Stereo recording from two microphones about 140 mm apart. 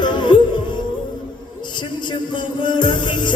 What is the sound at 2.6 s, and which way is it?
Music, 35° left (ahead or behind).